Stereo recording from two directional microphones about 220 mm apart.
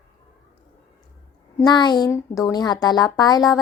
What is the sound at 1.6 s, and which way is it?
A woman's voice, 20° left (ahead or behind).